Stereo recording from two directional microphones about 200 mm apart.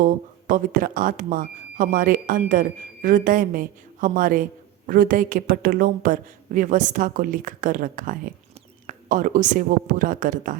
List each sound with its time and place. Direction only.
0.0 s speech: 40° right (ahead or behind)